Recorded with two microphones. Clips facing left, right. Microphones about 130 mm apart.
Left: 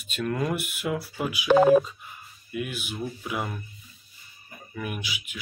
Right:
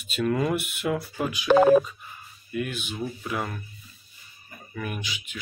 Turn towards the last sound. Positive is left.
turn(degrees=5)  # may be behind; listen again after turning